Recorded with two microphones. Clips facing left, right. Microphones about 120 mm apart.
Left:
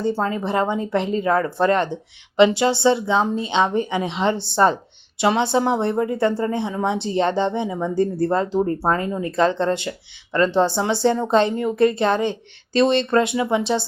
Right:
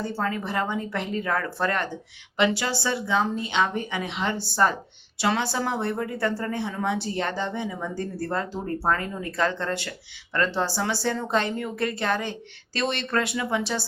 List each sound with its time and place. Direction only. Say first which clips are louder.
0.0 s speech: left 6 dB; 25° left (ahead or behind)